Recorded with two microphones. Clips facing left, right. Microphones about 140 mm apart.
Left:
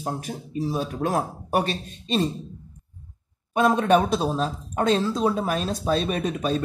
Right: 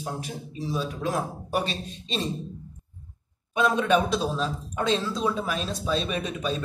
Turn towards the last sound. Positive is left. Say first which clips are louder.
# left 4 dB
turn(degrees=50)  # may be behind; listen again after turning